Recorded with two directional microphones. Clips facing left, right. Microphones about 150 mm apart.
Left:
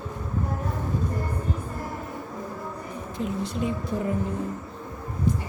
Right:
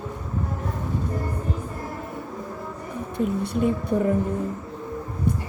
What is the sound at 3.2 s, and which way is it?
Speech, 55° right (ahead or behind).